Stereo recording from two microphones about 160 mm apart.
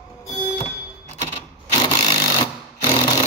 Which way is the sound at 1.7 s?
25° left (ahead or behind).